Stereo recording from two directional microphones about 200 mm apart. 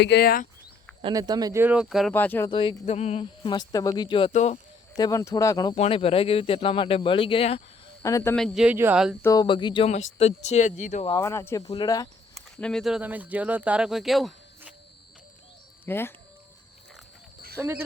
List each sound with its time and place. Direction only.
0.0 s speech: 55° left (ahead or behind)
1.0 s speech: 20° right (ahead or behind); by 2.1 s centre (ahead or behind)
2.1 s speech: 10° left (ahead or behind)
2.5 s speech: 25° left (ahead or behind)
4.9 s speech: 15° left (ahead or behind)
5.7 s speech: 30° left (ahead or behind)
8.0 s speech: 15° left (ahead or behind)
8.4 s speech: centre (ahead or behind)
9.2 s speech: 20° left (ahead or behind); by 11.0 s 40° left (ahead or behind)
11.0 s speech: 15° left (ahead or behind)
12.5 s speech: 5° left (ahead or behind)
15.9 s speech: 10° left (ahead or behind)
17.6 s speech: 10° right (ahead or behind)